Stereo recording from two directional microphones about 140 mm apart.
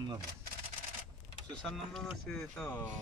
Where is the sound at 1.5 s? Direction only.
5° left (ahead or behind).